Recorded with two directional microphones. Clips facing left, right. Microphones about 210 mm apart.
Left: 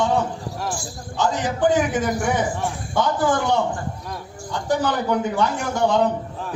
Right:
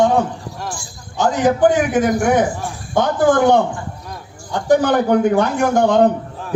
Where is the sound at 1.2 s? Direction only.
60° right (ahead or behind).